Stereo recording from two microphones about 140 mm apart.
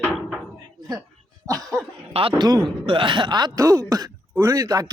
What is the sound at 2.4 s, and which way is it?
Speech, 30° right (ahead or behind).